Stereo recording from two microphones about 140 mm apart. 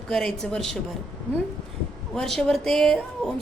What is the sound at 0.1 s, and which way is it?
Speech, 5° left (ahead or behind).